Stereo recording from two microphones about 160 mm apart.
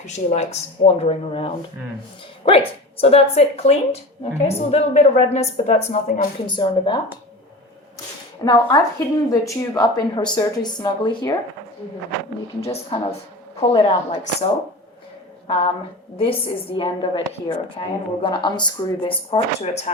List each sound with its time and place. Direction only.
0.0 s a woman's voice: 45° left (ahead or behind)
6.4 s speech: 30° left (ahead or behind)
8.4 s speech: 25° left (ahead or behind)
12.6 s a woman's voice: 40° left (ahead or behind)